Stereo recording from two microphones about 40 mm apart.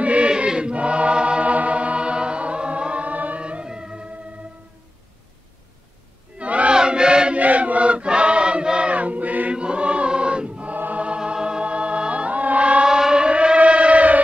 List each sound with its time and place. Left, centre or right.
0.0 s choir: right
3.6 s music: centre
6.3 s a sound: right
6.7 s chant: right
7.3 s choir: right
9.5 s choir: right
11.1 s music: right
12.8 s civil defense siren: centre; by 14.2 s right